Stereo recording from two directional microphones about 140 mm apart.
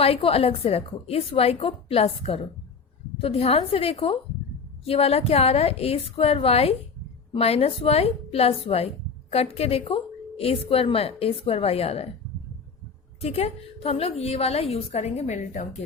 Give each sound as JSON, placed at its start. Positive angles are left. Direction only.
{"t": 0.0, "sound": "a woman's voice", "side_deg": 45}
{"t": 13.2, "sound": "a woman's voice", "side_deg": 45}